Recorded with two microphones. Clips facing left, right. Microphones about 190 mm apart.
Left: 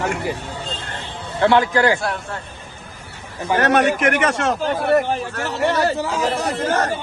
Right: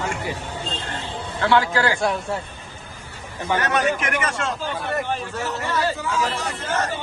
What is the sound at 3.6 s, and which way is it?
A man's voice, 70° left (ahead or behind).